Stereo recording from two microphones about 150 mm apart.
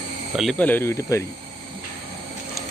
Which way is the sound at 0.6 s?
10° left (ahead or behind).